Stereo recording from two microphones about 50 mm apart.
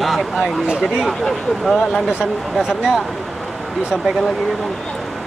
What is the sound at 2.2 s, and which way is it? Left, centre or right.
Speech, centre.